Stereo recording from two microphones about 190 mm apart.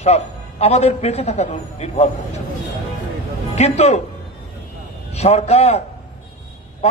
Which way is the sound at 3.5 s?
35° left (ahead or behind).